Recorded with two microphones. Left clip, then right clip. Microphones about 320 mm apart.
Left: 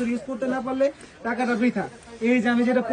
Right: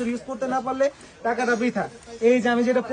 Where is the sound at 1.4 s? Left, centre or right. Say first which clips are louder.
Even; centre.